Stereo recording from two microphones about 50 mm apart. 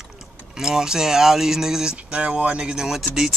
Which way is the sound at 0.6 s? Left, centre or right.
Centre.